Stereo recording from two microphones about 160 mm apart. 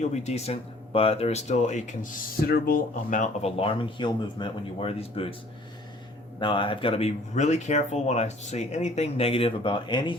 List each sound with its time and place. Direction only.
0.0 s speech: 45° left (ahead or behind)
2.5 s speech: 60° left (ahead or behind)
3.6 s speech: 35° left (ahead or behind)
6.4 s speech: 30° left (ahead or behind)